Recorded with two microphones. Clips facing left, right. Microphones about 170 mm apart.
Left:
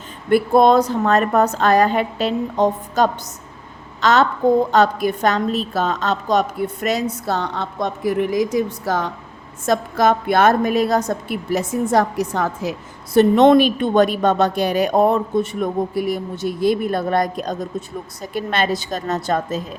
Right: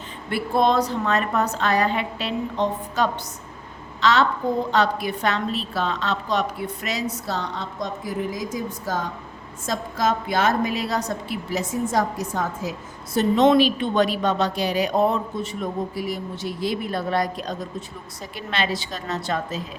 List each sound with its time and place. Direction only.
0.3 s a woman's voice: 50° left (ahead or behind); by 9.0 s 75° left (ahead or behind)
9.6 s a woman's voice: 60° left (ahead or behind); by 19.6 s 45° left (ahead or behind)